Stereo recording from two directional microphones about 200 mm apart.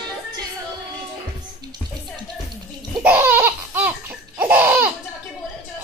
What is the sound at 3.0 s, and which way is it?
Laughter, 10° right (ahead or behind).